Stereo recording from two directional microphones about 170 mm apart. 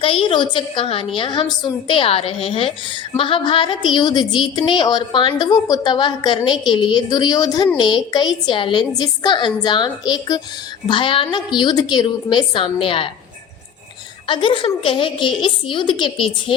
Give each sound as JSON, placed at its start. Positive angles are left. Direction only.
{"t": 0.0, "sound": "a woman's voice", "side_deg": 30}
{"t": 14.3, "sound": "a woman's voice", "side_deg": 30}